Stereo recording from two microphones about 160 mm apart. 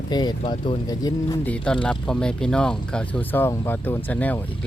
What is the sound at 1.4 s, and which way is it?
Speech, 10° left (ahead or behind).